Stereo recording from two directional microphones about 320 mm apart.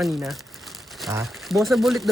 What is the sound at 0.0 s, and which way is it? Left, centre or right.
Speech, centre.